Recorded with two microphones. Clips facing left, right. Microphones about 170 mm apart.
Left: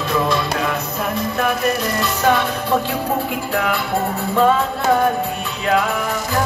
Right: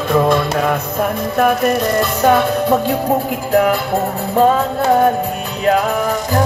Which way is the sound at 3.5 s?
40° right (ahead or behind).